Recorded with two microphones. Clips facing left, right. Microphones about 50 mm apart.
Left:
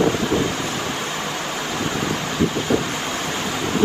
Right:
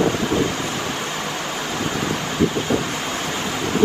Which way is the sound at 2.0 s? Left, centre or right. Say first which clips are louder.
Right 2 dB; right.